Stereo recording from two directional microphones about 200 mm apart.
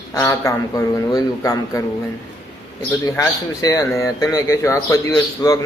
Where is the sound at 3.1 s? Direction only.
15° left (ahead or behind).